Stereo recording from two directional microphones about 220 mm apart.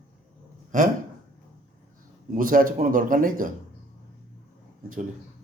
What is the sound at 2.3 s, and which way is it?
Speech, 40° right (ahead or behind).